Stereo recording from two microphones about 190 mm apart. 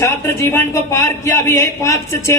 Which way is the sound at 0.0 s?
15° left (ahead or behind).